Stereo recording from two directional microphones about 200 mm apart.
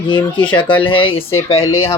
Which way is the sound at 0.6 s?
25° left (ahead or behind).